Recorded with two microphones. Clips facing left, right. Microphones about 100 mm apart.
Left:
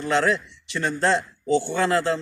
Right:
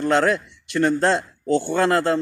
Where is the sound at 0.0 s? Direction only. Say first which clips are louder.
Right 3 dB; 55° right (ahead or behind).